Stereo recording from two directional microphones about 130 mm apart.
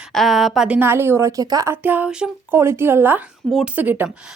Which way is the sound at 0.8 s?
20° right (ahead or behind).